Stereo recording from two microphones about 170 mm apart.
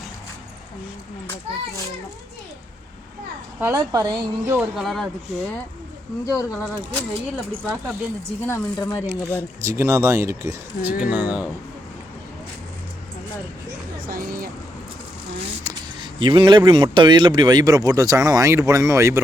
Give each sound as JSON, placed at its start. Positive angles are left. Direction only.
{"t": 3.6, "sound": "speech", "side_deg": -20}
{"t": 4.5, "sound": "speech", "side_deg": 0}
{"t": 6.2, "sound": "speech", "side_deg": 20}
{"t": 9.0, "sound": "speech", "side_deg": -15}
{"t": 14.1, "sound": "a sound", "side_deg": -60}
{"t": 15.6, "sound": "speech", "side_deg": -30}